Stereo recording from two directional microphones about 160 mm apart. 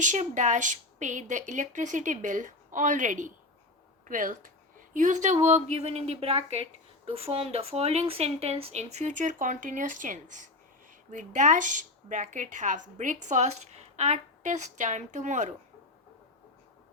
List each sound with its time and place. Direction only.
0.0 s speech: 50° right (ahead or behind)